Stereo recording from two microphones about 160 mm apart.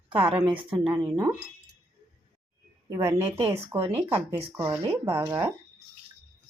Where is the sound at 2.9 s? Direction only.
20° right (ahead or behind).